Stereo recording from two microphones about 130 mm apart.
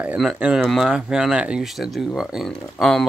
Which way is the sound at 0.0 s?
5° right (ahead or behind).